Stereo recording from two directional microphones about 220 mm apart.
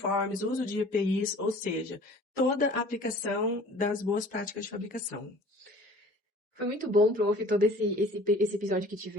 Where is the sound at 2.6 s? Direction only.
40° left (ahead or behind).